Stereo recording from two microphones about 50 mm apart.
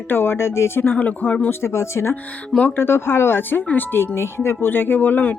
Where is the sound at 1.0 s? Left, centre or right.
Left.